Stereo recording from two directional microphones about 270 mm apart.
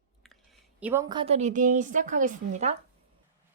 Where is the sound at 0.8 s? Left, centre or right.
Centre; by 2.7 s right.